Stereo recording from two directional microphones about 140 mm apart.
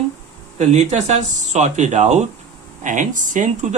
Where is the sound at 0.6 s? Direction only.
55° right (ahead or behind).